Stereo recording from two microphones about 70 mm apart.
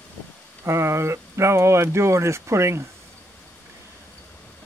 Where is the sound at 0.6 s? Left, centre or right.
Right.